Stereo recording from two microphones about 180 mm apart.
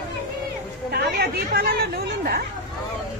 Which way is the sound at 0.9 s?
60° right (ahead or behind).